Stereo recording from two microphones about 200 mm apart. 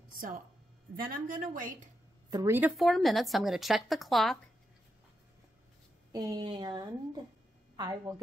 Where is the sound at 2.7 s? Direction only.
Centre (ahead or behind).